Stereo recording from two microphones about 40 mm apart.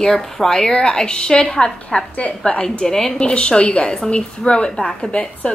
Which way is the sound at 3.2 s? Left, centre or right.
Left.